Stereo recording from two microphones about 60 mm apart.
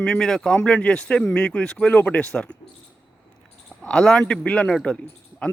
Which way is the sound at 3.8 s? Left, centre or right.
Centre.